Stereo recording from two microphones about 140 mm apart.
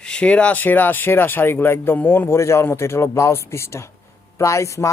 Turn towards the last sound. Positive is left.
turn(degrees=20)  # may be behind; listen again after turning